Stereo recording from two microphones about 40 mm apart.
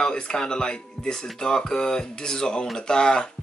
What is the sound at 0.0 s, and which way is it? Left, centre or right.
A man's voice, centre.